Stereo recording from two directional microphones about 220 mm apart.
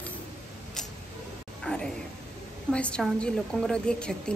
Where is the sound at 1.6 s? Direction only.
5° left (ahead or behind).